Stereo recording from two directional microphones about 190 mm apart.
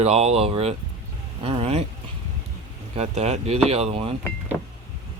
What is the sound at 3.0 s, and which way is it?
Speech, 35° right (ahead or behind).